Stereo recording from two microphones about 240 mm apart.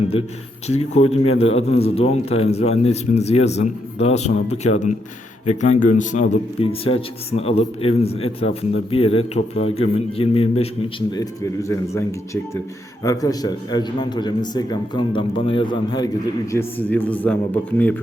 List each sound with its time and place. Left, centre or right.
0.7 s a man's voice: left; by 17.9 s centre